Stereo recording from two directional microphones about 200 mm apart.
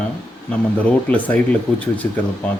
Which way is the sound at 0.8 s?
10° left (ahead or behind).